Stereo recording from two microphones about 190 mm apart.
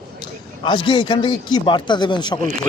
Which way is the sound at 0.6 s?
25° left (ahead or behind).